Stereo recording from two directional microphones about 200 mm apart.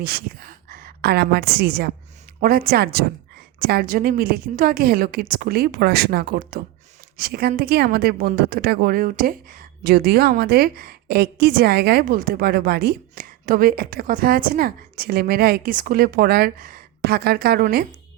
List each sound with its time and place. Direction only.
0.0 s a woman's voice: 50° right (ahead or behind)